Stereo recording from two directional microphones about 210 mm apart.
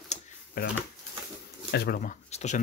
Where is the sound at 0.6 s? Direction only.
45° left (ahead or behind).